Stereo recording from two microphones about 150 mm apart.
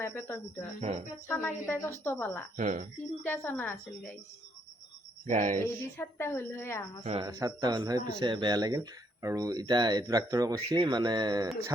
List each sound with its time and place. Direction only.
0.0 s a woman's voice: 15° left (ahead or behind)
0.8 s speech: 50° right (ahead or behind)
1.3 s a woman's voice: 10° left (ahead or behind)
2.6 s speech: 55° right (ahead or behind)
3.2 s a woman's voice: 15° left (ahead or behind)
5.2 s speech: 55° right (ahead or behind)
5.5 s a woman's voice: 15° left (ahead or behind)
7.0 s speech: 45° right (ahead or behind)
7.3 s speech: 25° right (ahead or behind)